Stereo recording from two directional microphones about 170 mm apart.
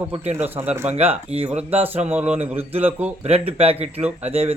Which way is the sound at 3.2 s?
35° right (ahead or behind).